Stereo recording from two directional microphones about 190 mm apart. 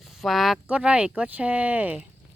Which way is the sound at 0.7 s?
5° right (ahead or behind).